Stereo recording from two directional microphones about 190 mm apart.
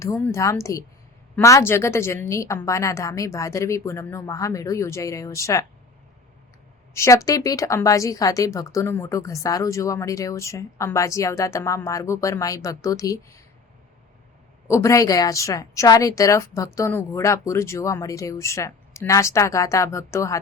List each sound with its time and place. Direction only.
0.0 s a woman's voice: 15° left (ahead or behind)
6.9 s a woman's voice: 15° left (ahead or behind)
14.7 s a woman's voice: 15° left (ahead or behind)